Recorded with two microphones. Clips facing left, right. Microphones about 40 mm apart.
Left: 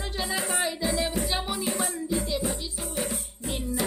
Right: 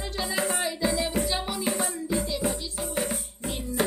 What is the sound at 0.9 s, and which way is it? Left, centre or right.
Music, centre.